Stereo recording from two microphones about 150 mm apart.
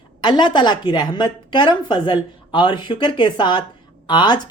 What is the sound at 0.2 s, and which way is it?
A woman's voice, 30° left (ahead or behind).